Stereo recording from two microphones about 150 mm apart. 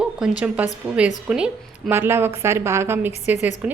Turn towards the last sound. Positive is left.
turn(degrees=-10)  # may be behind; listen again after turning